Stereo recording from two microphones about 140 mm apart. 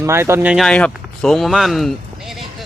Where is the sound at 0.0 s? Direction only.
20° right (ahead or behind).